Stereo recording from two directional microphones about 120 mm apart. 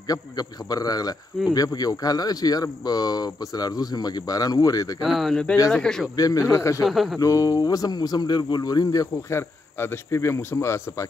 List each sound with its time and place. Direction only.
0.1 s speech: 30° left (ahead or behind)
5.0 s speech: centre (ahead or behind)
6.1 s speech: 30° left (ahead or behind)
6.8 s speech: centre (ahead or behind)
7.2 s speech: 30° left (ahead or behind)